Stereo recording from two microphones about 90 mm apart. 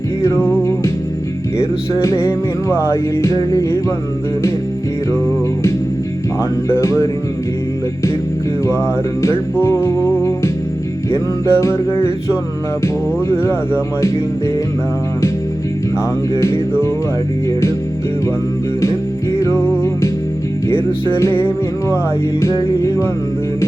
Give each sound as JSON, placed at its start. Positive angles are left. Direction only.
{"t": 0.2, "sound": "music", "side_deg": 30}
{"t": 1.5, "sound": "music", "side_deg": 35}
{"t": 6.7, "sound": "music", "side_deg": 30}
{"t": 9.6, "sound": "music", "side_deg": 25}
{"t": 11.1, "sound": "music", "side_deg": 30}
{"t": 13.3, "sound": "music", "side_deg": 25}
{"t": 16.3, "sound": "music", "side_deg": 35}
{"t": 18.8, "sound": "music", "side_deg": 35}
{"t": 21.1, "sound": "music", "side_deg": 35}
{"t": 22.4, "sound": "music", "side_deg": 30}